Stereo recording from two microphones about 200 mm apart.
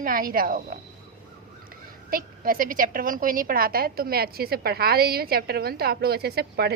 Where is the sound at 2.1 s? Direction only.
45° right (ahead or behind).